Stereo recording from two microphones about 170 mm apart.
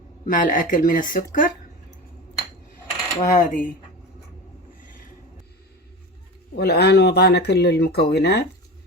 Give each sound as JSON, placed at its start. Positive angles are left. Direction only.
{"t": 0.3, "sound": "speech", "side_deg": 50}
{"t": 3.2, "sound": "speech", "side_deg": 50}
{"t": 6.6, "sound": "speech", "side_deg": 70}